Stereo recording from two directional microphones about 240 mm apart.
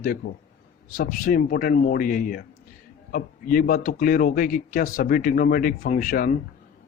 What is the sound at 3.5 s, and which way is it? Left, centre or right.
A man's voice, left.